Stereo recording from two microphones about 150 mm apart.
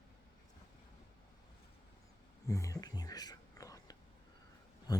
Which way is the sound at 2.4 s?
20° left (ahead or behind).